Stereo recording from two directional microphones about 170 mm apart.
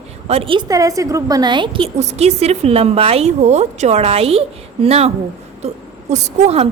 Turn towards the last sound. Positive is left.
turn(degrees=-35)  # may be behind; listen again after turning